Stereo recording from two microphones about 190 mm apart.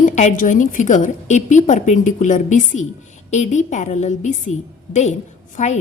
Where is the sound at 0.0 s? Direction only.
40° left (ahead or behind).